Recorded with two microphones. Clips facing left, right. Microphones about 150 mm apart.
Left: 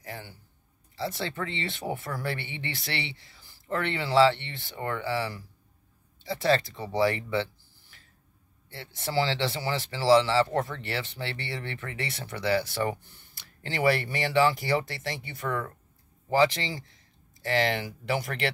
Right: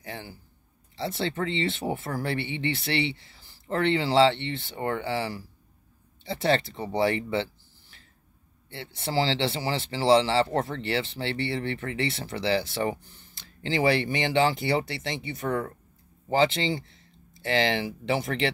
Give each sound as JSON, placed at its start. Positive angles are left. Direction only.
{"t": 0.9, "sound": "speech", "side_deg": -25}
{"t": 8.7, "sound": "speech", "side_deg": -25}
{"t": 17.8, "sound": "speech", "side_deg": -25}